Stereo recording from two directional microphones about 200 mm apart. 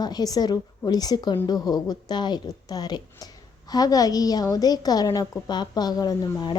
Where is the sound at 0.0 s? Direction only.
20° left (ahead or behind).